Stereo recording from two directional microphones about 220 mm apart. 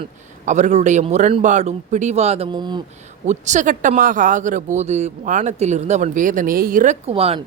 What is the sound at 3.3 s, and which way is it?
A man's voice, 35° right (ahead or behind).